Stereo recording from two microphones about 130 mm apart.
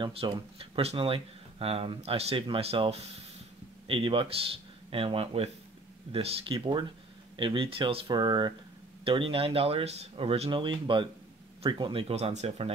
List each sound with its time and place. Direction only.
0.0 s a man's voice: 45° right (ahead or behind)
9.0 s speech: 45° right (ahead or behind)